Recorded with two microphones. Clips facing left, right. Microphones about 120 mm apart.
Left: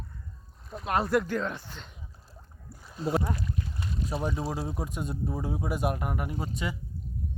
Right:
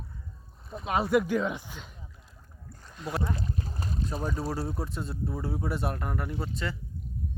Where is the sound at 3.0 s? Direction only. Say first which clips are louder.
Left 4 dB; 30° left (ahead or behind).